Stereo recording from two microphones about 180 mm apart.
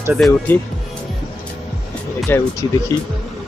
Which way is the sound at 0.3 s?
10° left (ahead or behind).